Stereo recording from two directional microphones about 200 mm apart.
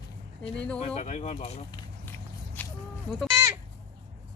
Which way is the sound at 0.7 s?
30° left (ahead or behind).